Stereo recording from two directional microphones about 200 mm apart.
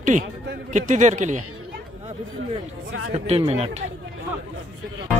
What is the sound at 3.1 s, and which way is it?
Speech, 30° right (ahead or behind).